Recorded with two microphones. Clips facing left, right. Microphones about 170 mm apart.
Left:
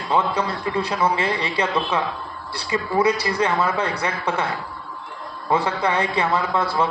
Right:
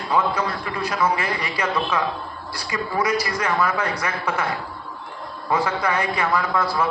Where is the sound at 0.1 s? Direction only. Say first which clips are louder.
Left 1 dB; 25° left (ahead or behind).